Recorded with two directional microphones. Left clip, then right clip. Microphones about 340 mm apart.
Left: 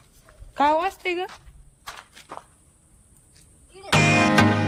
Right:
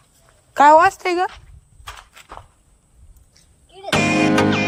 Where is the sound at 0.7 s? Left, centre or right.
Centre.